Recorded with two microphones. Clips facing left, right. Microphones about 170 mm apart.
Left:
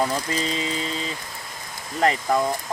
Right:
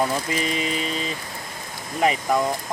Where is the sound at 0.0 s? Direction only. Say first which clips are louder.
Right 1 dB; 15° right (ahead or behind).